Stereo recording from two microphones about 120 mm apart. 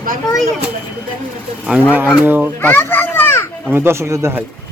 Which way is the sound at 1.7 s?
10° right (ahead or behind).